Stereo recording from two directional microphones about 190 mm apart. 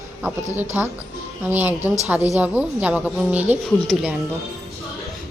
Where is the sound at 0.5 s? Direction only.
10° right (ahead or behind).